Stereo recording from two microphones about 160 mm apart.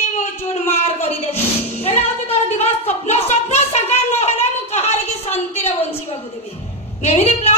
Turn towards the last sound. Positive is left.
turn(degrees=40)  # may be behind; listen again after turning